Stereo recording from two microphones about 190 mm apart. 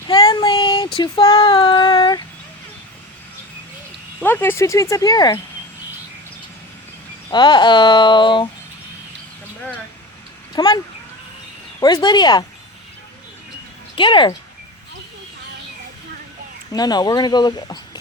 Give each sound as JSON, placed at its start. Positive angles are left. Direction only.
{"t": 0.1, "sound": "child singing", "side_deg": 20}
{"t": 0.9, "sound": "speech", "side_deg": 30}
{"t": 4.2, "sound": "speech", "side_deg": 10}
{"t": 7.3, "sound": "speech", "side_deg": 25}
{"t": 10.5, "sound": "speech", "side_deg": 25}
{"t": 11.8, "sound": "speech", "side_deg": 20}
{"t": 13.9, "sound": "speech", "side_deg": 25}
{"t": 16.7, "sound": "speech", "side_deg": 20}